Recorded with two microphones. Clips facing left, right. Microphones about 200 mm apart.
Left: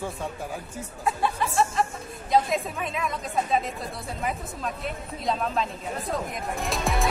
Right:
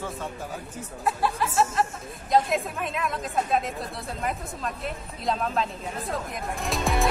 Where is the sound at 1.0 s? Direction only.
Centre (ahead or behind).